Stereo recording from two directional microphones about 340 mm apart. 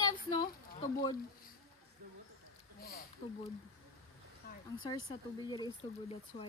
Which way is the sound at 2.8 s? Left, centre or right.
Left.